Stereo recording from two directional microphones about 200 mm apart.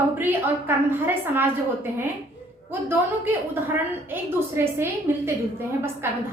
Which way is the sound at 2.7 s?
10° right (ahead or behind).